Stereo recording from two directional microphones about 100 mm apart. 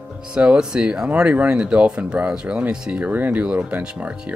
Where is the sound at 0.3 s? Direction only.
10° right (ahead or behind).